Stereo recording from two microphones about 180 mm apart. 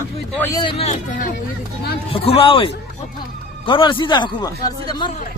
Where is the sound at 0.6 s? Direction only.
30° left (ahead or behind).